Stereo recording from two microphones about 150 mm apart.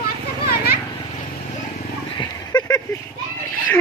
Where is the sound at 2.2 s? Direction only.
25° left (ahead or behind).